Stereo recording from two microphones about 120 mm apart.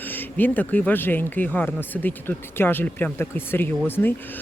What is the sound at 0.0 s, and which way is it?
Speech, 15° left (ahead or behind).